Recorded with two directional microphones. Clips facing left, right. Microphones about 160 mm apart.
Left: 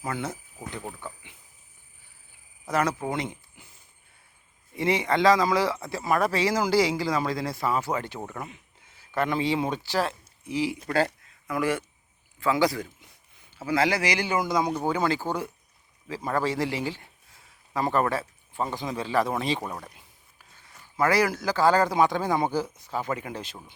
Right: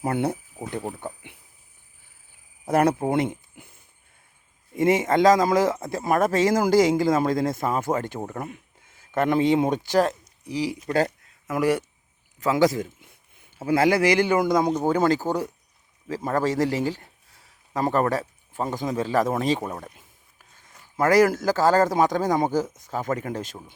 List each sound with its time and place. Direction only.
0.0 s speech: 60° right (ahead or behind)
0.8 s speech: 30° right (ahead or behind)
1.0 s speech: 60° right (ahead or behind)
3.1 s speech: 55° right (ahead or behind)
4.8 s a man's voice: 45° right (ahead or behind)